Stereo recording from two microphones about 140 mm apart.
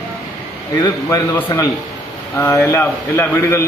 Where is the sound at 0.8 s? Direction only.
25° left (ahead or behind).